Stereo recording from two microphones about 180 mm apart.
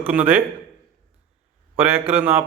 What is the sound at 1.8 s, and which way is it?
Speech, 35° right (ahead or behind).